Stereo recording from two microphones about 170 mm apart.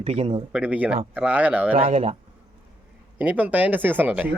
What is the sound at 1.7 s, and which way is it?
Speech, 35° right (ahead or behind).